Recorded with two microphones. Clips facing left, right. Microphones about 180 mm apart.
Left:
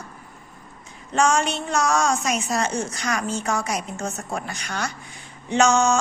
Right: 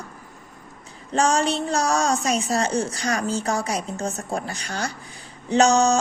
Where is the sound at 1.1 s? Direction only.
35° right (ahead or behind).